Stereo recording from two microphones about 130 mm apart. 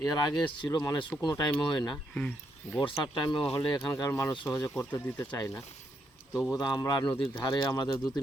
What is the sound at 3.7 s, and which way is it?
Speech, 25° left (ahead or behind).